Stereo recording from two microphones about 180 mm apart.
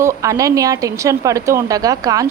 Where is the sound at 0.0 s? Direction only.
15° right (ahead or behind).